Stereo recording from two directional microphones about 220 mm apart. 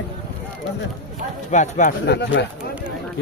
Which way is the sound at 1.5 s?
35° left (ahead or behind).